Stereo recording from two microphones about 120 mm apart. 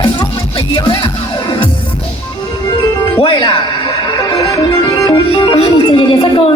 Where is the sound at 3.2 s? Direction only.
45° left (ahead or behind).